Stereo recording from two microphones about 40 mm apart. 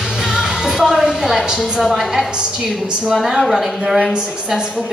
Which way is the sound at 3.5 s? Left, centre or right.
Centre.